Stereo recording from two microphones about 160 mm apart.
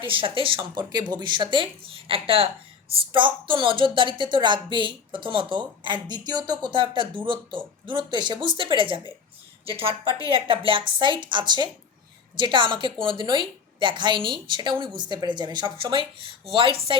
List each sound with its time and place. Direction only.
0.0 s a woman's voice: 30° right (ahead or behind)